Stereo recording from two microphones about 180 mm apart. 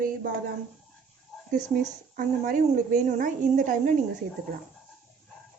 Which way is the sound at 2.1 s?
50° right (ahead or behind).